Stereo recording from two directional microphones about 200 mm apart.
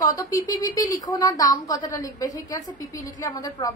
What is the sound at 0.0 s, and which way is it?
A woman's voice, 15° left (ahead or behind).